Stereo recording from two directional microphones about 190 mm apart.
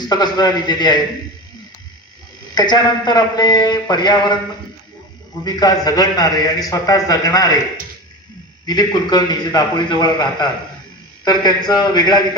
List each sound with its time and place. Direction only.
0.0 s a man's voice: 20° left (ahead or behind)
2.5 s a man's voice: 20° left (ahead or behind)
5.4 s a man's voice: 20° left (ahead or behind)
8.6 s a man's voice: 20° left (ahead or behind)